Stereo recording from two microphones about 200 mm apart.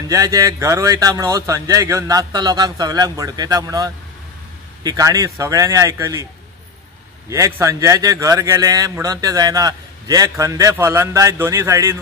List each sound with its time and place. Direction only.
0.1 s a man's voice: 15° right (ahead or behind)
7.2 s a man's voice: 15° right (ahead or behind)